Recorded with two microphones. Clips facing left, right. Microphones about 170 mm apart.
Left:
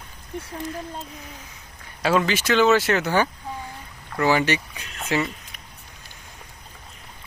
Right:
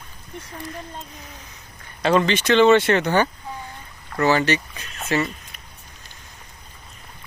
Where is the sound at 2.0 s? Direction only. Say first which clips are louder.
Right 2 dB; 5° left (ahead or behind).